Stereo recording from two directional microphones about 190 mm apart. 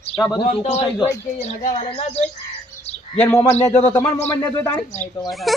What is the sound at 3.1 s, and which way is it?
Speech, 10° left (ahead or behind).